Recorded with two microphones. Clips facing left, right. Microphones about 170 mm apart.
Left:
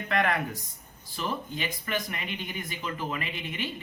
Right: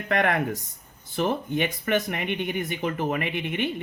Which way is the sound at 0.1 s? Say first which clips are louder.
Right 4 dB; 60° right (ahead or behind).